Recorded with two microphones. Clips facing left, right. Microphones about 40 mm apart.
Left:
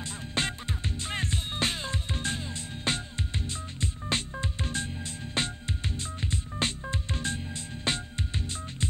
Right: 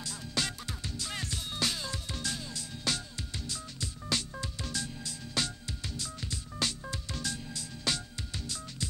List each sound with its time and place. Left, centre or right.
0.0 s music: left